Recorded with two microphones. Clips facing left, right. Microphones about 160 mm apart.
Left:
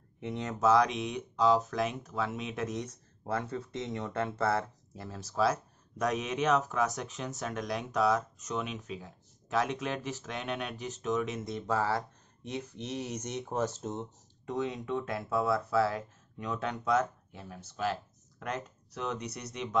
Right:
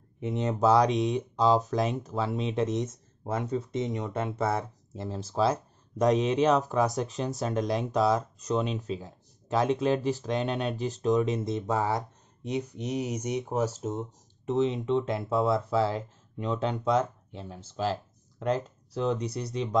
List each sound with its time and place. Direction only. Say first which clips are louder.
0.2 s speech: right 4 dB; 20° right (ahead or behind)
14.4 s speech: right 7 dB; 25° right (ahead or behind)